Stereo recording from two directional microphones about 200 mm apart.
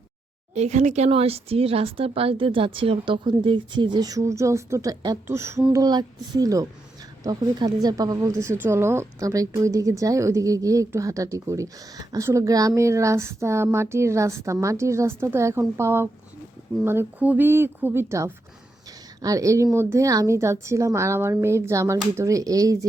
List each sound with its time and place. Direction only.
0.5 s speech: 35° right (ahead or behind); by 22.9 s 15° right (ahead or behind)